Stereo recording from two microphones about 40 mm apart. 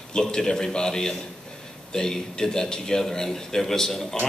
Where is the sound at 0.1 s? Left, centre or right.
Centre.